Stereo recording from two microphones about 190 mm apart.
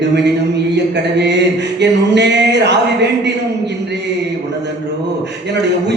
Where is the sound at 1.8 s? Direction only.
65° right (ahead or behind).